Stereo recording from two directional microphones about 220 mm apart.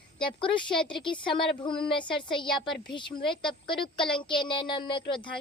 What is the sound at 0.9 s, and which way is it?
A woman's voice, 20° left (ahead or behind).